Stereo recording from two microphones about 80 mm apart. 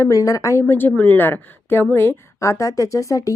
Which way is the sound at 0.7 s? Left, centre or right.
Left.